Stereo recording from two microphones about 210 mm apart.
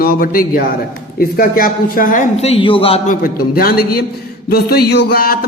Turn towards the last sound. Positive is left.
turn(degrees=45)  # may be behind; listen again after turning